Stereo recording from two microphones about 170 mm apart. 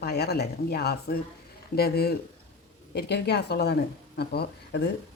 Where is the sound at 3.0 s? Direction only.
75° left (ahead or behind).